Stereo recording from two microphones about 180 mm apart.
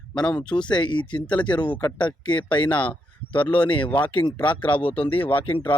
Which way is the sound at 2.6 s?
10° left (ahead or behind).